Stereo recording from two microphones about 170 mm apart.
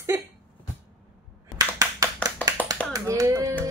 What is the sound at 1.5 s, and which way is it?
Clapping, 20° right (ahead or behind).